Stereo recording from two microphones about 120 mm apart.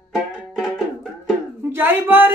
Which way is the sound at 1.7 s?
15° right (ahead or behind).